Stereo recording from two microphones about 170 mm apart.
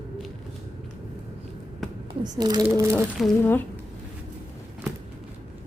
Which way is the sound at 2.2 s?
25° right (ahead or behind).